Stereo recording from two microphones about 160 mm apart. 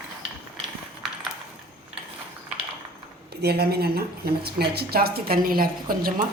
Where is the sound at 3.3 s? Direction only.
85° right.